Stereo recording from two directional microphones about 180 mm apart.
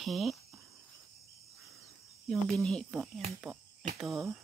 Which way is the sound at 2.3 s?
5° left (ahead or behind).